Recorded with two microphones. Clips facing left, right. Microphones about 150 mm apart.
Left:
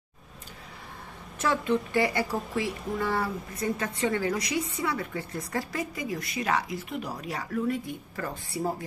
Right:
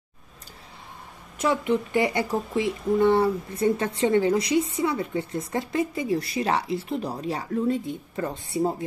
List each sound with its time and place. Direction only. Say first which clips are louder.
1.4 s speech: right 3 dB; 15° right (ahead or behind)